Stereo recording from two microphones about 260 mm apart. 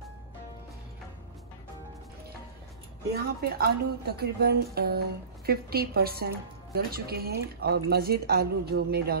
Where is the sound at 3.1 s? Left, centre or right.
Right.